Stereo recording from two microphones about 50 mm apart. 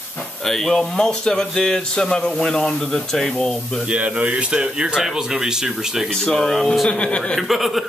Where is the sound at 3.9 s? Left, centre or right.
Right; by 6.1 s centre.